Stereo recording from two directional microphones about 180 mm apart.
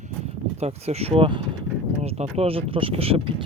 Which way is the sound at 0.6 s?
35° right (ahead or behind).